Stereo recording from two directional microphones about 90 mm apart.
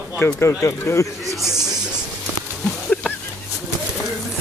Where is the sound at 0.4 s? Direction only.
35° left (ahead or behind).